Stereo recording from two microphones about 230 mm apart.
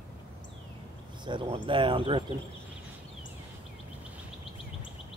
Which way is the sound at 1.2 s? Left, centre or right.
Right.